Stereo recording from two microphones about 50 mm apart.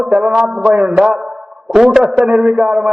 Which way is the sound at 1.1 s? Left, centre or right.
Centre.